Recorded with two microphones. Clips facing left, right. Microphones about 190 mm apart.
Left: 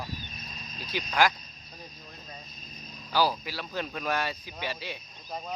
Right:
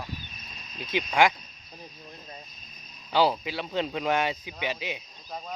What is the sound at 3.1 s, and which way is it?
Speech, 25° right (ahead or behind).